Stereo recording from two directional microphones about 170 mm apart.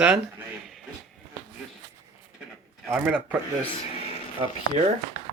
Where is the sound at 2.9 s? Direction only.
5° right (ahead or behind).